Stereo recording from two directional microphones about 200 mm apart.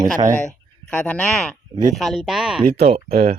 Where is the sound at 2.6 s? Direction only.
30° right (ahead or behind).